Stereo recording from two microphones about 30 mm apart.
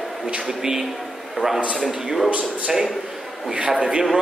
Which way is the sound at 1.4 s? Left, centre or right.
Centre.